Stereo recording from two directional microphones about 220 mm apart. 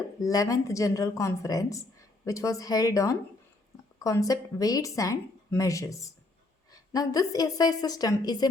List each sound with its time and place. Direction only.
0.2 s speech: 15° left (ahead or behind)